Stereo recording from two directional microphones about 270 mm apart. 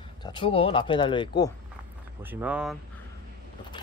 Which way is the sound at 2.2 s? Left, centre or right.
Centre.